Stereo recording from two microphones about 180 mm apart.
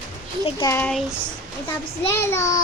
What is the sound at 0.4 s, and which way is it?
Speech, 20° left (ahead or behind).